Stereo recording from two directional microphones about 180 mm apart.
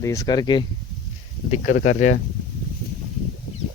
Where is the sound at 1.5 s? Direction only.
40° left (ahead or behind).